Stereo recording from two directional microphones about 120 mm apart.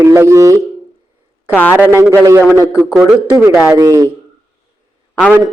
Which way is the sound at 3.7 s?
30° right (ahead or behind).